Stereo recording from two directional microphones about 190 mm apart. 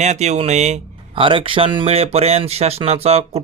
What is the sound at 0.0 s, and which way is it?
Speech, 35° right (ahead or behind).